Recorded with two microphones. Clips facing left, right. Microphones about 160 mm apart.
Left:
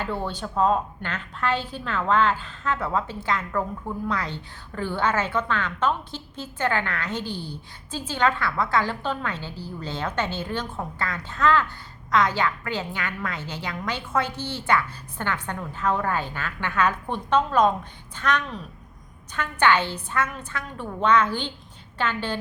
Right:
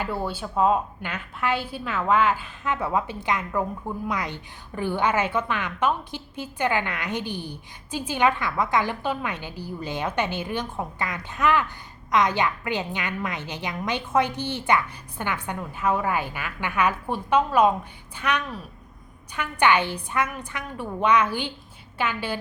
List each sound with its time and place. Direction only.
0.0 s a woman's voice: 10° right (ahead or behind)